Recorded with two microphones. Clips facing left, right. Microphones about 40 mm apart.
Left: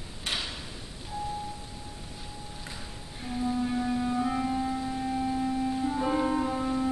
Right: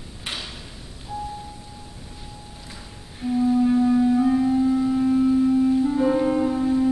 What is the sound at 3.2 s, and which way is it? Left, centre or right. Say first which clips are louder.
Music: right 10 dB; centre.